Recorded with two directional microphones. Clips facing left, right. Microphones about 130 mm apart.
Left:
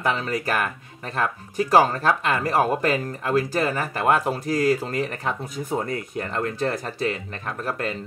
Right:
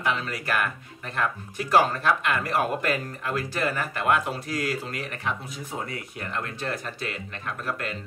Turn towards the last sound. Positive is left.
turn(degrees=35)  # may be behind; listen again after turning